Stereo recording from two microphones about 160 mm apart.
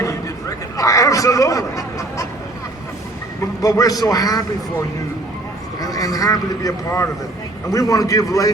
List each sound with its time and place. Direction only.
0.8 s snicker: 20° left (ahead or behind)
3.4 s a man's voice: 20° left (ahead or behind)